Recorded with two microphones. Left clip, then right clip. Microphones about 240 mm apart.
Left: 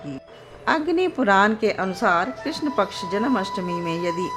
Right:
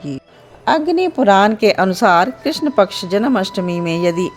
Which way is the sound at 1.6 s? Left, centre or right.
Right.